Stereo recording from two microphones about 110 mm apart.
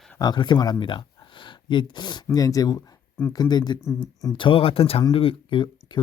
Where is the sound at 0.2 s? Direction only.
40° left (ahead or behind).